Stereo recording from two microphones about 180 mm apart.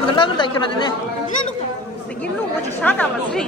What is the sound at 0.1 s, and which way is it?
Speech, 25° left (ahead or behind).